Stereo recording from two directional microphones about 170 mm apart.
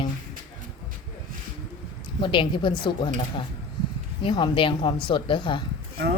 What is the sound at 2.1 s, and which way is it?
Speech, 30° left (ahead or behind).